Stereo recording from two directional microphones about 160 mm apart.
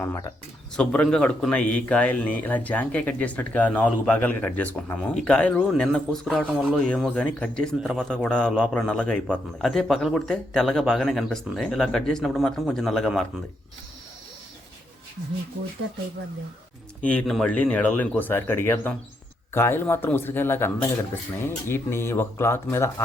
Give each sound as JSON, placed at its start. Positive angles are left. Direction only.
{"t": 0.0, "sound": "speech", "side_deg": 20}
{"t": 0.8, "sound": "a man's voice", "side_deg": 5}
{"t": 17.1, "sound": "speech", "side_deg": 5}